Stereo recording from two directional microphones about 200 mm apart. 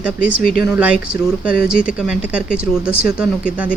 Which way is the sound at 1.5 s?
45° left (ahead or behind).